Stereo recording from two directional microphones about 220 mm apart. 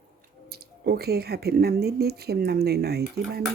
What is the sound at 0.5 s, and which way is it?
Speech, 45° right (ahead or behind).